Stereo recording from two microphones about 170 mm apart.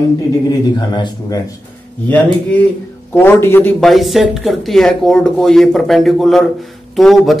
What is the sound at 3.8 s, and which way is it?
A man's voice, centre (ahead or behind).